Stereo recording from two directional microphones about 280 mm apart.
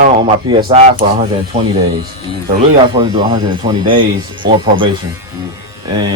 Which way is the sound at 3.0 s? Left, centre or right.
Centre.